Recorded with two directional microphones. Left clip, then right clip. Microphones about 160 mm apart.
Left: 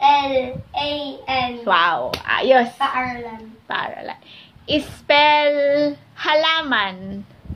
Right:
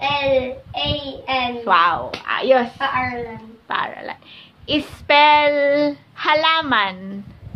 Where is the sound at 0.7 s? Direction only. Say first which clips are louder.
Even; 20° right (ahead or behind).